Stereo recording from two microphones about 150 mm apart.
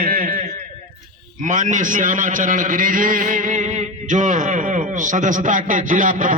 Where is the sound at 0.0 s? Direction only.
70° right (ahead or behind).